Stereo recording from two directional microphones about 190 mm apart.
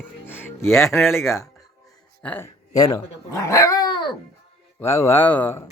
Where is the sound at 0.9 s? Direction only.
Centre (ahead or behind).